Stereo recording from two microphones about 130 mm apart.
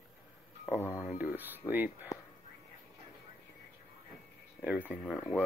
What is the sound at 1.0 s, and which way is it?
Speech, 10° right (ahead or behind).